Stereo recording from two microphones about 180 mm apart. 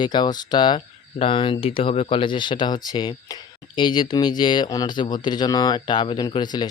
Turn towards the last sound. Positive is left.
turn(degrees=25)  # may be behind; listen again after turning